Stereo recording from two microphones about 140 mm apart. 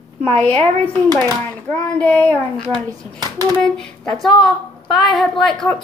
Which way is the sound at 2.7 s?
30° right (ahead or behind).